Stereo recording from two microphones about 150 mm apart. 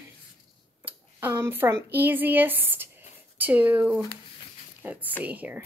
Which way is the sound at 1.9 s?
10° right (ahead or behind).